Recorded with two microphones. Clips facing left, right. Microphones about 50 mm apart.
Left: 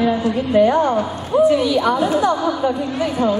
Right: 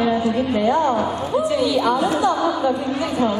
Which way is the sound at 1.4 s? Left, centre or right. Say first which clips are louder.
Left 5 dB; left.